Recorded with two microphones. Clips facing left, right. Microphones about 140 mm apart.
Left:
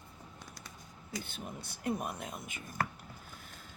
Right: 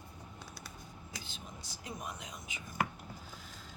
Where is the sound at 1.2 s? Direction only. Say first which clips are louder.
Left 5 dB; 55° left (ahead or behind).